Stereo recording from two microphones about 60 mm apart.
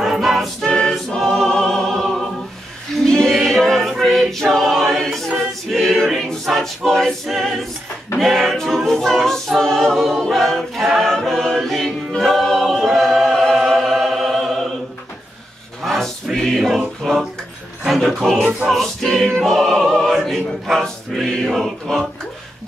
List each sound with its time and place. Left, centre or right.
0.0 s choir: centre
0.7 s choir: centre
5.4 s a capella: centre
7.2 s speech: centre
8.2 s a capella: centre
10.3 s choir: centre
15.8 s music: centre
17.0 s speech: centre
18.4 s music: centre
18.7 s choir: centre
20.1 s speech: centre